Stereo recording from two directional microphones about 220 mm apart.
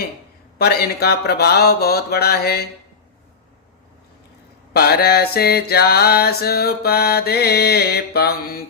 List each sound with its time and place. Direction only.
0.6 s mantra: 45° left (ahead or behind)
4.7 s mantra: 45° left (ahead or behind)